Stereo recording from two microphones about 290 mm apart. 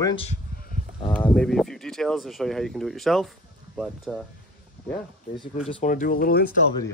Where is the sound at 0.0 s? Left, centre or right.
Centre.